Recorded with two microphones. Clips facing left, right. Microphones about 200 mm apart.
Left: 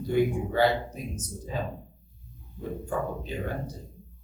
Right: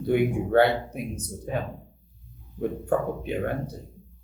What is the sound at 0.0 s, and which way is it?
Speech, 60° right (ahead or behind).